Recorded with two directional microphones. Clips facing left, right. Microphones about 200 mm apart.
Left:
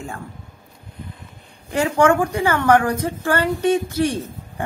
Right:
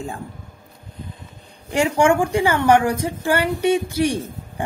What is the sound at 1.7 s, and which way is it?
Speech, 15° right (ahead or behind).